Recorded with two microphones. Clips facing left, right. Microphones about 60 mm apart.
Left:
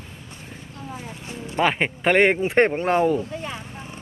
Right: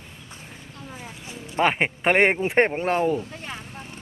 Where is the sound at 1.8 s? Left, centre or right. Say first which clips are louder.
Left 3 dB; right.